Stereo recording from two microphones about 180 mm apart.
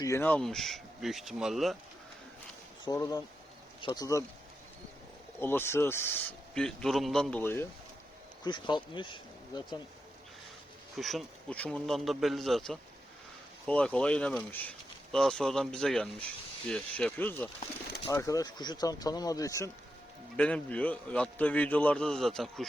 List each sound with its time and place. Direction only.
0.0 s speech: 15° left (ahead or behind); by 1.7 s centre (ahead or behind)
2.8 s speech: 20° left (ahead or behind)
5.4 s a man's voice: 10° left (ahead or behind)
8.4 s speech: 25° left (ahead or behind)
10.9 s a man's voice: centre (ahead or behind); by 19.7 s 15° left (ahead or behind)
20.3 s a man's voice: 5° left (ahead or behind)